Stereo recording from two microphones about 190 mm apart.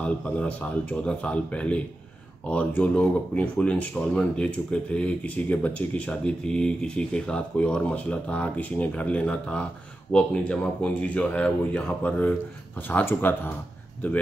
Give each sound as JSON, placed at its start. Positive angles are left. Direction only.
{"t": 0.0, "sound": "speech", "side_deg": 5}